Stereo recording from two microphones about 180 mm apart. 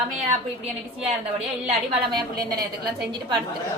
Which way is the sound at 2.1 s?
20° right (ahead or behind).